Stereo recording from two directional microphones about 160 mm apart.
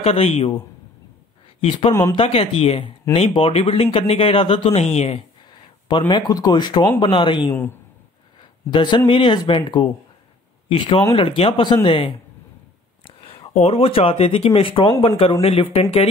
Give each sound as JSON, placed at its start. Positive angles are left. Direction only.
{"t": 0.0, "sound": "speech", "side_deg": 40}
{"t": 1.6, "sound": "speech", "side_deg": 35}
{"t": 5.9, "sound": "speech", "side_deg": 30}